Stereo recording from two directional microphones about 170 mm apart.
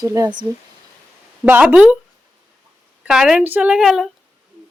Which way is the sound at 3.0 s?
5° right (ahead or behind).